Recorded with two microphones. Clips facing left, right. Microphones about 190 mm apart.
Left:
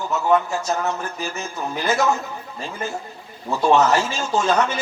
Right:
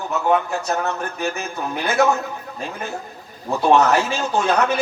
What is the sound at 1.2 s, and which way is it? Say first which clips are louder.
Speech: right 3 dB; 60° right (ahead or behind).